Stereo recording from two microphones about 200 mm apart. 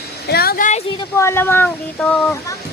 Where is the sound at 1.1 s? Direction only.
10° left (ahead or behind).